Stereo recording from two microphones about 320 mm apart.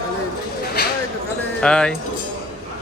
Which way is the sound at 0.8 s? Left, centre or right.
Left.